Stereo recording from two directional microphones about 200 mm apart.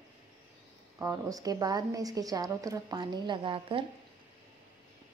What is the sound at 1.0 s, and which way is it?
A woman's voice, 15° right (ahead or behind).